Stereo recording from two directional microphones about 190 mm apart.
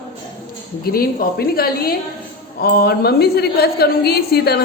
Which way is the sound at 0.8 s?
50° left (ahead or behind).